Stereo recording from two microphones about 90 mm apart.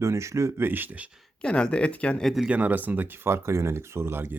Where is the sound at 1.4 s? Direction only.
10° left (ahead or behind).